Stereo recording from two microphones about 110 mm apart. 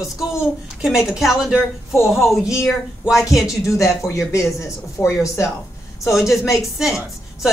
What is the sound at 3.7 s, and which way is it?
Speech, 30° left (ahead or behind).